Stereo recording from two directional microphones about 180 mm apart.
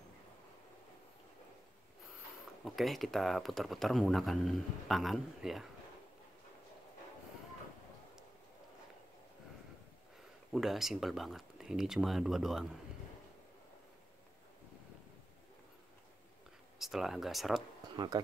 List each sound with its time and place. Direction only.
2.6 s speech: centre (ahead or behind)
10.5 s speech: centre (ahead or behind)
16.7 s speech: centre (ahead or behind)
17.9 s speech: 25° right (ahead or behind)